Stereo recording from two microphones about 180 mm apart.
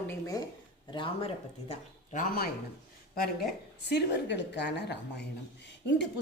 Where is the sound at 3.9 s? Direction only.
70° left (ahead or behind).